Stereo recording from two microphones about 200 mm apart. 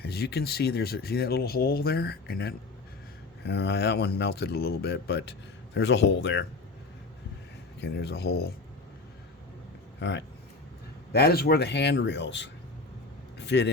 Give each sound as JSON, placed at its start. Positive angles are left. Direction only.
{"t": 0.0, "sound": "speech", "side_deg": 55}
{"t": 7.8, "sound": "speech", "side_deg": 55}
{"t": 10.0, "sound": "speech", "side_deg": 60}
{"t": 11.1, "sound": "speech", "side_deg": 50}